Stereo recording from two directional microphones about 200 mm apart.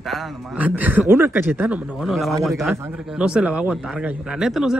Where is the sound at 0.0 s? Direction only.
Centre (ahead or behind).